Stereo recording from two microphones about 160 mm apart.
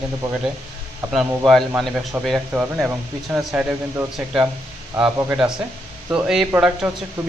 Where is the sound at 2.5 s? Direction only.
15° right (ahead or behind).